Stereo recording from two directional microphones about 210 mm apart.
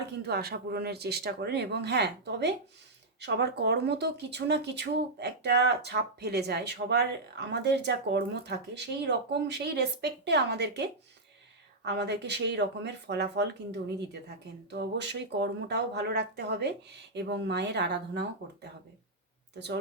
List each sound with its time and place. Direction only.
0.2 s speech: 50° right (ahead or behind)